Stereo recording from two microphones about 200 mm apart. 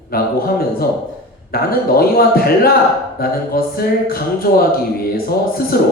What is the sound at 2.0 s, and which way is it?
Speech, 50° left (ahead or behind).